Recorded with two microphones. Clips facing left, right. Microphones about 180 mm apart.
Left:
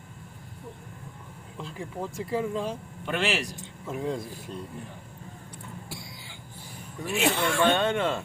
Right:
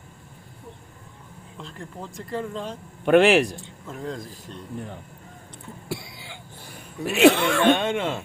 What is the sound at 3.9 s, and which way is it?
Speech, 5° left (ahead or behind).